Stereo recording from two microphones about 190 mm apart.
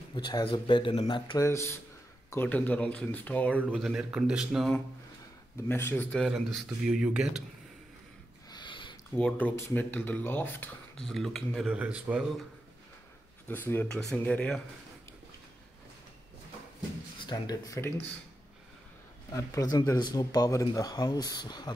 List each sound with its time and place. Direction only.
0.1 s speech: 25° left (ahead or behind); by 4.8 s centre (ahead or behind)
5.7 s speech: 10° left (ahead or behind)
6.6 s speech: 5° right (ahead or behind)
8.5 s a sound: 25° left (ahead or behind)
9.1 s speech: 10° left (ahead or behind)
13.5 s speech: 10° left (ahead or behind)
17.2 s speech: 20° left (ahead or behind)
19.3 s speech: 15° left (ahead or behind)